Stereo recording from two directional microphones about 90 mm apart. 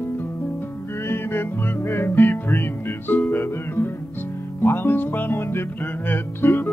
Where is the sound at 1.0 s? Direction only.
25° left (ahead or behind).